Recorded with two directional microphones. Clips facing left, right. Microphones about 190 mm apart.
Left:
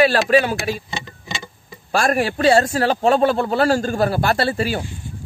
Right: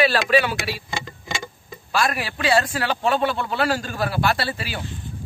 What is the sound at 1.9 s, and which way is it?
A man's voice, 45° left (ahead or behind).